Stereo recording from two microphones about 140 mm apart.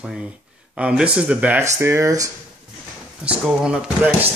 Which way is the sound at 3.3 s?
5° right (ahead or behind).